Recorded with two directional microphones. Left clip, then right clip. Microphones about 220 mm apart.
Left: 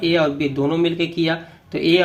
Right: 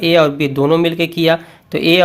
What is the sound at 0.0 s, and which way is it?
Speech, 40° right (ahead or behind).